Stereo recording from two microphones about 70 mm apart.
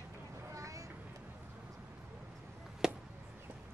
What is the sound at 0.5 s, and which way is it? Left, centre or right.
Vehicle, right.